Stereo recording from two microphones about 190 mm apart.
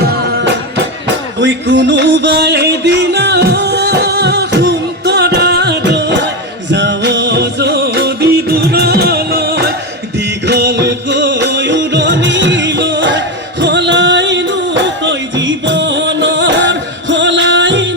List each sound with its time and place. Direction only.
0.0 s music: 55° right (ahead or behind); by 17.9 s 70° right (ahead or behind)